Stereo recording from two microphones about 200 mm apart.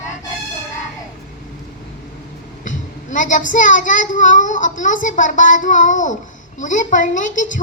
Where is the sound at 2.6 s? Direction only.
40° left (ahead or behind).